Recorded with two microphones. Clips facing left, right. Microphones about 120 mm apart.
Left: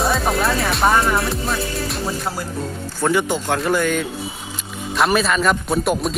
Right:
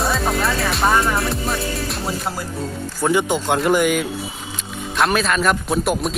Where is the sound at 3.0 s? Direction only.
15° right (ahead or behind).